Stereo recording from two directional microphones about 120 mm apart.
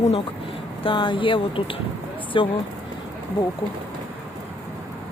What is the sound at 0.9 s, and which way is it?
Speech, 45° left (ahead or behind).